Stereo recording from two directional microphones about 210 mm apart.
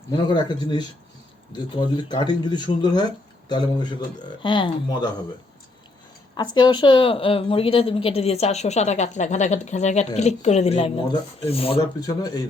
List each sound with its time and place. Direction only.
0.3 s a woman's voice: 20° left (ahead or behind)
4.4 s a woman's voice: 25° left (ahead or behind)
6.3 s a woman's voice: 20° left (ahead or behind)